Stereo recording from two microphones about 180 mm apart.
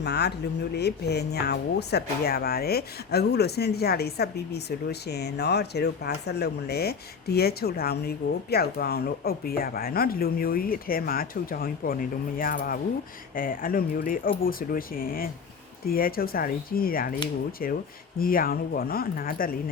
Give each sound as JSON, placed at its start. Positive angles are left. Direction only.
{"t": 0.0, "sound": "speech", "side_deg": 65}